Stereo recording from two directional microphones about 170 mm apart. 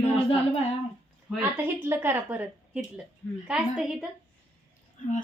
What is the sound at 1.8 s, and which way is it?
A woman's voice, 10° right (ahead or behind).